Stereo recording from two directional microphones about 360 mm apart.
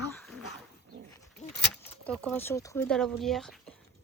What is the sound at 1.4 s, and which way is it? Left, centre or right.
Keys jangling, centre.